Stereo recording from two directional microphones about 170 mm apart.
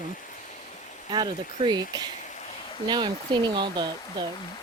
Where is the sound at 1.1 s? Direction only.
25° right (ahead or behind).